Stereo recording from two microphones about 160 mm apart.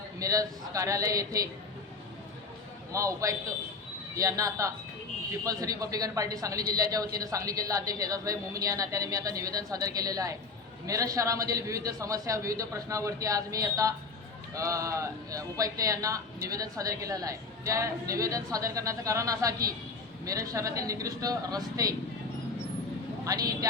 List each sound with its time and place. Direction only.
0.2 s a man's voice: 20° right (ahead or behind)
2.9 s a man's voice: 20° right (ahead or behind)
23.2 s a man's voice: 20° right (ahead or behind)